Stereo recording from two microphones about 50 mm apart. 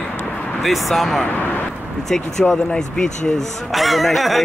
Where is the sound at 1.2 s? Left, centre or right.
Left.